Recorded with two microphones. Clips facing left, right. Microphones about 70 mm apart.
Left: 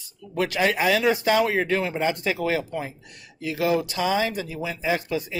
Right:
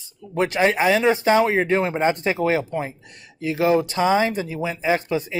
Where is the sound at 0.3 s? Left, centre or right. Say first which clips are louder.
Right 3 dB; right.